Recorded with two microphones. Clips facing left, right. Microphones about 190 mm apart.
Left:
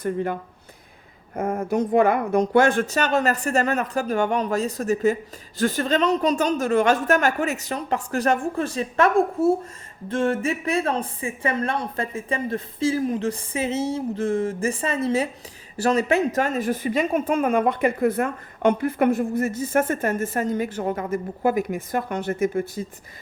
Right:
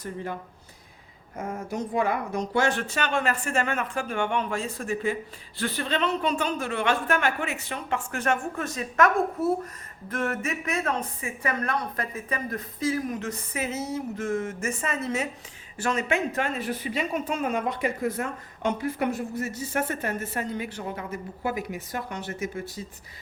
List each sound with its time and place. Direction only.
0.0 s speech: 55° left (ahead or behind)
1.4 s a woman's voice: 55° left (ahead or behind)